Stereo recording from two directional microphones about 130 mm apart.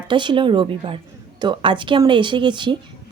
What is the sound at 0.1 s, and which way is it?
Speech, 40° right (ahead or behind).